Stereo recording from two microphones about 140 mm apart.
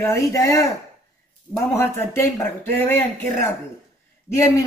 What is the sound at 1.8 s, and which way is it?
Speech, 15° left (ahead or behind).